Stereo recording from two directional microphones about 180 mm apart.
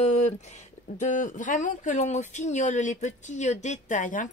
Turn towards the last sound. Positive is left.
turn(degrees=45)  # may be behind; listen again after turning